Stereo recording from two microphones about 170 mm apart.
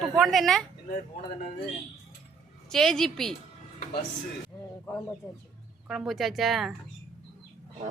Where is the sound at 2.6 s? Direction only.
5° left (ahead or behind).